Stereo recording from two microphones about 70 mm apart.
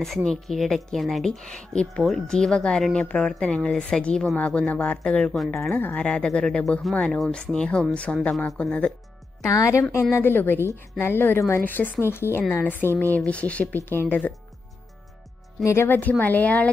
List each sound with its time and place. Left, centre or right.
0.0 s a woman's voice: centre
5.3 s a woman's voice: centre
5.7 s a woman's voice: left
6.0 s a woman's voice: centre
9.4 s a woman's voice: left
10.1 s a woman's voice: left
13.8 s speech: left
15.6 s speech: left
16.0 s a woman's voice: left